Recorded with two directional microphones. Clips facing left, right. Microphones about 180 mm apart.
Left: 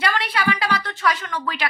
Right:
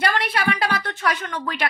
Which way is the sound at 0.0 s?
50° right (ahead or behind).